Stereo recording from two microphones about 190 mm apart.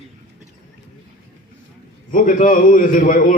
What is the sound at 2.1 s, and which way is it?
A man's voice, 40° left (ahead or behind).